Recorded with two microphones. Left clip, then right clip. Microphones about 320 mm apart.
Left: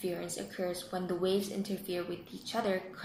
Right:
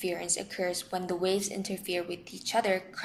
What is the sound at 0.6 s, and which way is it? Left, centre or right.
A woman's voice, right.